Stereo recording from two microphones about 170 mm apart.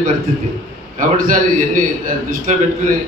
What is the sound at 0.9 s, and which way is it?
Speech, 55° right (ahead or behind).